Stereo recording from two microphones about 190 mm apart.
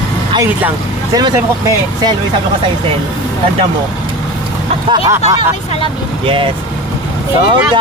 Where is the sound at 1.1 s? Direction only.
20° right (ahead or behind).